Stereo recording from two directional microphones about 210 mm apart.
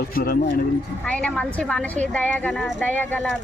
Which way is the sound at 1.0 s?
5° left (ahead or behind).